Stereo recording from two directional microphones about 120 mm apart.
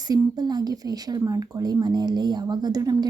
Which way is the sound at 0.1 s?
35° right (ahead or behind).